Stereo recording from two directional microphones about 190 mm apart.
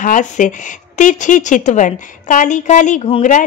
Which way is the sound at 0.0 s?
40° left (ahead or behind).